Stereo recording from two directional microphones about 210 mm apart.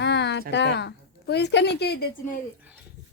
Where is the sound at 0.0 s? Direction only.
55° left (ahead or behind).